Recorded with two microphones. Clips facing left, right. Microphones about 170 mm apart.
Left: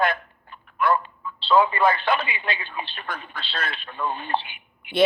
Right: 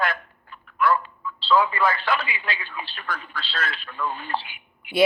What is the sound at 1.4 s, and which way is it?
Speech, 25° left (ahead or behind).